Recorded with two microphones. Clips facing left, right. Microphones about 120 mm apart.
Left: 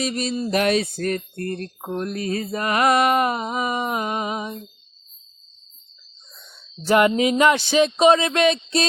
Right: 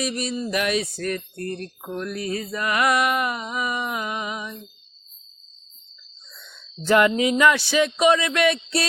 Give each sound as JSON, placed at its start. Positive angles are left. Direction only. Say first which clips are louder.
{"t": 0.0, "sound": "mantra", "louder": "left 2 dB", "side_deg": 25}
{"t": 0.5, "sound": "a sound", "louder": "left 5 dB", "side_deg": 35}
{"t": 0.8, "sound": "speech", "louder": "left 3 dB", "side_deg": 55}
{"t": 1.8, "sound": "mantra", "louder": "left 3 dB", "side_deg": 30}
{"t": 2.2, "sound": "mantra", "louder": "left 2 dB", "side_deg": 55}
{"t": 2.5, "sound": "mantra", "louder": "left 3 dB", "side_deg": 30}
{"t": 6.8, "sound": "mantra", "louder": "left 1 dB", "side_deg": 20}